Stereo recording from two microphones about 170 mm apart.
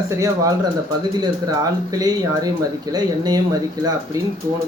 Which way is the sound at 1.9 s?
20° right (ahead or behind).